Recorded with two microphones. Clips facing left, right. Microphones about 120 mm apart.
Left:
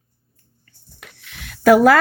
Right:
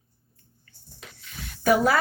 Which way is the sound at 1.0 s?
80° left.